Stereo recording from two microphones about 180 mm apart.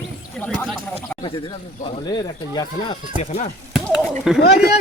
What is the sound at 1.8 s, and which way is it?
Speech, 25° left (ahead or behind).